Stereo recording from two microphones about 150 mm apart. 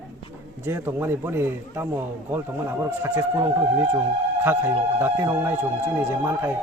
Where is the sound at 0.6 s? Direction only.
15° right (ahead or behind).